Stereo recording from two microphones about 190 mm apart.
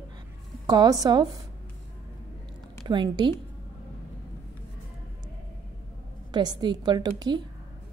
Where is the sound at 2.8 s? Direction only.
25° right (ahead or behind).